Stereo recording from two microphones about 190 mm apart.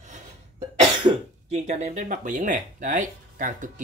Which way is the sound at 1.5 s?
35° right (ahead or behind).